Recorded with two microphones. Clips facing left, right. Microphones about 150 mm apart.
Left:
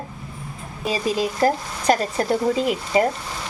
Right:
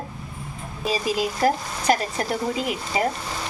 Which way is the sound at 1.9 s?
30° left (ahead or behind).